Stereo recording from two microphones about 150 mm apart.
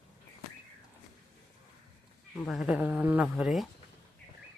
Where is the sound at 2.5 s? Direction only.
5° right (ahead or behind).